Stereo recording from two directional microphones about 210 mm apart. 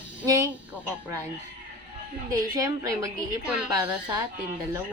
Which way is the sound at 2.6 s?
15° right (ahead or behind).